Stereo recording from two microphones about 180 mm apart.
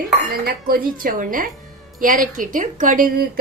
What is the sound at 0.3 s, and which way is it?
A woman's voice, 55° right (ahead or behind).